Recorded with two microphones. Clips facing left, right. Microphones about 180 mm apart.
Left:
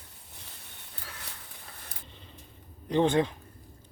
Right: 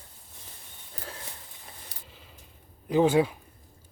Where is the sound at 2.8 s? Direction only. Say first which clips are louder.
Right 3 dB; 5° right (ahead or behind).